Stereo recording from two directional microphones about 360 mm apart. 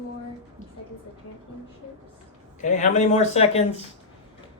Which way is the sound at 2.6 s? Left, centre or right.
Centre.